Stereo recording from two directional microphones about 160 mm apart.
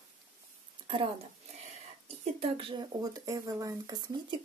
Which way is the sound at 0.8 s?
35° right (ahead or behind).